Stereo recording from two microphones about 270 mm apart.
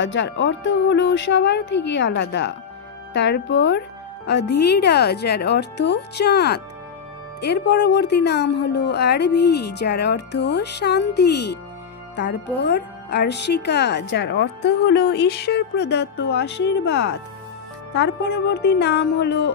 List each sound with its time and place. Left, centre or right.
0.0 s speech: left